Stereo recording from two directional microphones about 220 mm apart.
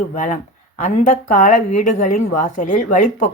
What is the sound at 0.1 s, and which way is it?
Speech, 30° left (ahead or behind).